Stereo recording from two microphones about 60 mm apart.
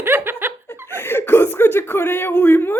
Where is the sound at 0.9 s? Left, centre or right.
Left.